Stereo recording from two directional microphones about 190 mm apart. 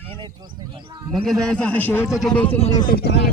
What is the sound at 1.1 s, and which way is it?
A man's voice, centre (ahead or behind).